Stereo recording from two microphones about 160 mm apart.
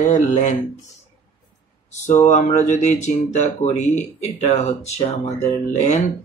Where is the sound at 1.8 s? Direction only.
45° left (ahead or behind).